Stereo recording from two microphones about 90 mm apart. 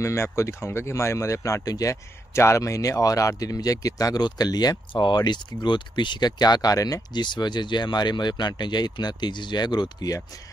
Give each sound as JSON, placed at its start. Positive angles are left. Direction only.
{"t": 0.0, "sound": "speech", "side_deg": 30}
{"t": 7.2, "sound": "speech", "side_deg": 55}